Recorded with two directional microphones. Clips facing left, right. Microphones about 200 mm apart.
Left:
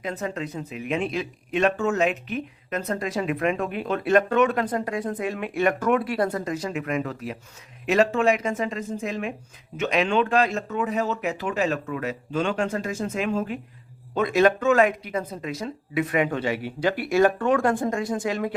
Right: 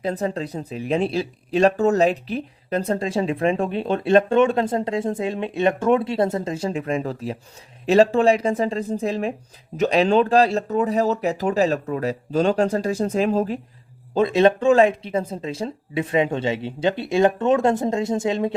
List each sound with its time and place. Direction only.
0.0 s speech: 35° right (ahead or behind)